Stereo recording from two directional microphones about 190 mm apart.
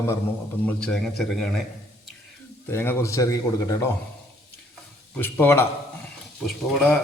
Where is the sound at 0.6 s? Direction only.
5° left (ahead or behind).